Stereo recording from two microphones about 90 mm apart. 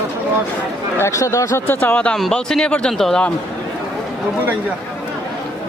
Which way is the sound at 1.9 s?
10° left (ahead or behind).